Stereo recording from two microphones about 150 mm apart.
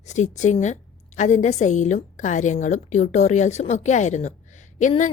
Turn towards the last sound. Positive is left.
turn(degrees=55)  # may be behind; listen again after turning